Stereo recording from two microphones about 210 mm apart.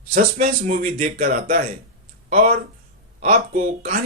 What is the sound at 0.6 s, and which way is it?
Speech, 35° right (ahead or behind).